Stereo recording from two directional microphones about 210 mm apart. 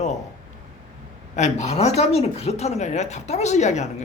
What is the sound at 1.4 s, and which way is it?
A man's voice, 30° left (ahead or behind).